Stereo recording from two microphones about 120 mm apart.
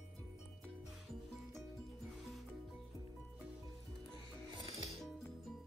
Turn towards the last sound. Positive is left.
turn(degrees=65)  # may be behind; listen again after turning